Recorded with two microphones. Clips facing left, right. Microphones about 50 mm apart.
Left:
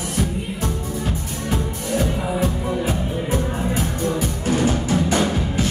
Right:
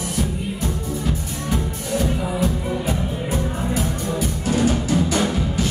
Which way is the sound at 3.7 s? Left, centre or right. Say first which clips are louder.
Left 1 dB; left.